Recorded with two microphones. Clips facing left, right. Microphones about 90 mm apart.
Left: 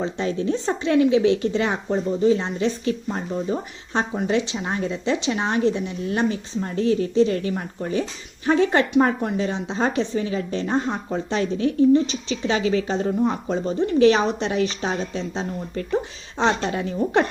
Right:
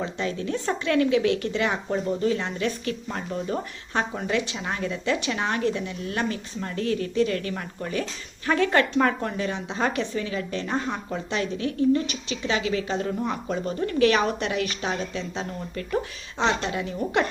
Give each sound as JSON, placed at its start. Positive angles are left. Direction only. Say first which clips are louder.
{"t": 0.0, "sound": "a woman's voice", "louder": "left 5 dB", "side_deg": 30}